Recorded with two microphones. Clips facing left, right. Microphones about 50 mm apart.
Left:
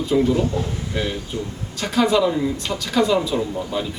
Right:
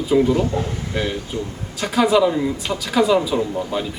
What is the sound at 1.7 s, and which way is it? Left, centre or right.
Speech, centre.